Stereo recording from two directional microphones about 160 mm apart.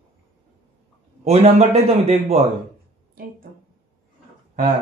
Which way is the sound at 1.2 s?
40° right (ahead or behind).